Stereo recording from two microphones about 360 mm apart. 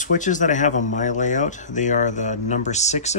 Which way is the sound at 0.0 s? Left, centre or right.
Left.